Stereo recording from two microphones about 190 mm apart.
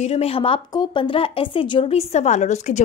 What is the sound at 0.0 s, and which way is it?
A woman's voice, 30° left (ahead or behind).